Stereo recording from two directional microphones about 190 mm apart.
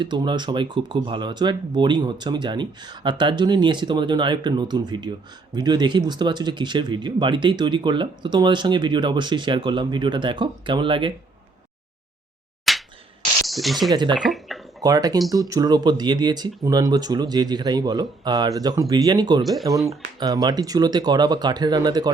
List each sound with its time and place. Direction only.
0.0 s speech: 25° right (ahead or behind)
12.7 s slap: centre (ahead or behind)
13.5 s speech: centre (ahead or behind)
13.9 s speech: 25° right (ahead or behind)
14.2 s bathtub: centre (ahead or behind)
14.8 s speech: 20° right (ahead or behind)